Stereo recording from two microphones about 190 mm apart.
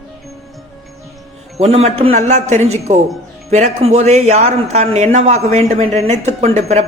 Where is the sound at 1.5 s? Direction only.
35° right (ahead or behind).